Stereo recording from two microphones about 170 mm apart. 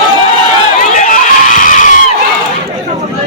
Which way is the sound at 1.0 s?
50° left (ahead or behind).